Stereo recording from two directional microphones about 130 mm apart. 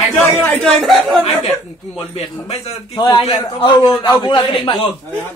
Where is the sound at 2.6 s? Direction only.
55° left (ahead or behind).